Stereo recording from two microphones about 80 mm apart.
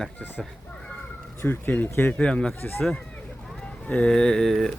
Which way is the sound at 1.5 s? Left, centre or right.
Left.